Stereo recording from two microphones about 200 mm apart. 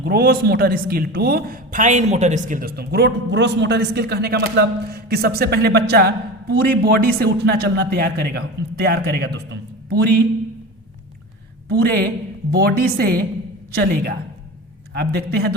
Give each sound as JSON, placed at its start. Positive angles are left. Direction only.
{"t": 0.0, "sound": "a man's voice", "side_deg": -50}
{"t": 11.7, "sound": "a man's voice", "side_deg": -50}